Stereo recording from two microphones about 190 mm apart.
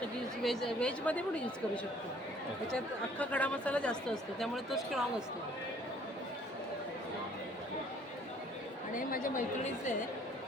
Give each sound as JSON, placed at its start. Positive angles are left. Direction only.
{"t": 0.4, "sound": "speech", "side_deg": 0}
{"t": 2.7, "sound": "speech", "side_deg": 5}
{"t": 9.0, "sound": "a woman's voice", "side_deg": 45}